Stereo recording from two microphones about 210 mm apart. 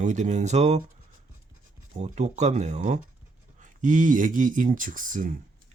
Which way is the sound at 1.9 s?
30° right (ahead or behind).